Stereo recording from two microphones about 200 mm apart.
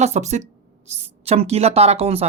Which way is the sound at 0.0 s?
35° right (ahead or behind).